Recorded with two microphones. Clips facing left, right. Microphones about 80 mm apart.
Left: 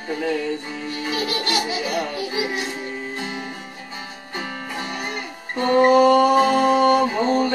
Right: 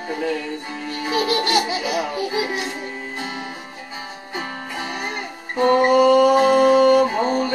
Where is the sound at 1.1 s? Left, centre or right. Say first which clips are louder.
Right 5 dB; right.